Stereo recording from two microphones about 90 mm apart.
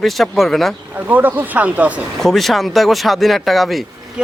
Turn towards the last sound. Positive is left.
turn(degrees=0)  # may be behind; listen again after turning